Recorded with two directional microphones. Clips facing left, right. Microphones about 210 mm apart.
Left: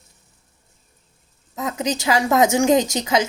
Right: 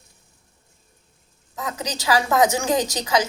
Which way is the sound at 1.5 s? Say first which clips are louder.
Left 6 dB; 20° left (ahead or behind).